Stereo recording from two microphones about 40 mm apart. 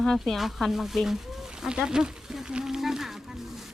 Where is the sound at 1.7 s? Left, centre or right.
Centre.